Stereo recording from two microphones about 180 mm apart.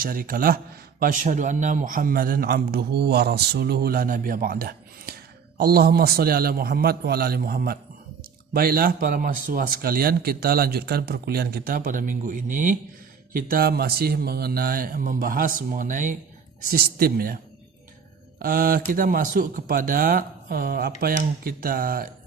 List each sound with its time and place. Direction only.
0.0 s a man's voice: 55° right (ahead or behind)
13.3 s a man's voice: 60° right (ahead or behind)